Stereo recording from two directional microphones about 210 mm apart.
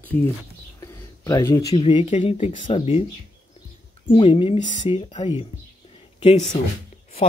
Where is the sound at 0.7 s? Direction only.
15° left (ahead or behind).